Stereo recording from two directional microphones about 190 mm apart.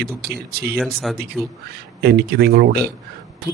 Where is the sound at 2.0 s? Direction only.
55° right (ahead or behind).